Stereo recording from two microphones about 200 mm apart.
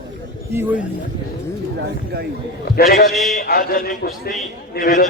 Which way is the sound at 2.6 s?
50° left (ahead or behind).